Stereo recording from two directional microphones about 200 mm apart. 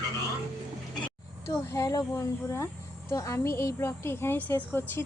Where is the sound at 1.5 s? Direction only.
15° left (ahead or behind).